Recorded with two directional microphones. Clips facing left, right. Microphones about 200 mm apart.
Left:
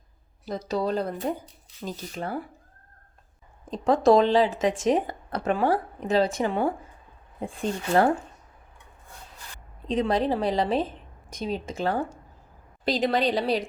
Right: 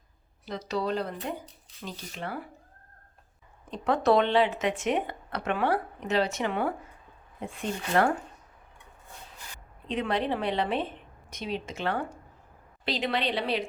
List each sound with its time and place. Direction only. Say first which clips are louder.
0.4 s speech: left 3 dB; 50° left (ahead or behind)
3.7 s speech: left 5 dB; 30° left (ahead or behind)
9.8 s speech: left 5 dB; 40° left (ahead or behind)